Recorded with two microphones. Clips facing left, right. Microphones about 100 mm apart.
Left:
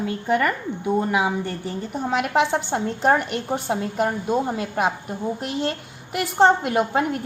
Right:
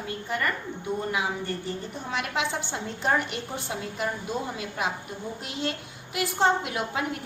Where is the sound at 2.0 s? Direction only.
50° left (ahead or behind).